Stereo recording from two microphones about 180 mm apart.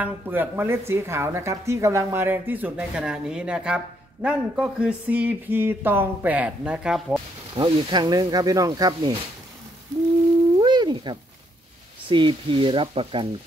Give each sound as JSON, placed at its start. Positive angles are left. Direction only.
{"t": 0.0, "sound": "speech", "side_deg": -10}
{"t": 7.5, "sound": "speech", "side_deg": -25}
{"t": 10.6, "sound": "a sound", "side_deg": -25}
{"t": 12.1, "sound": "speech", "side_deg": -30}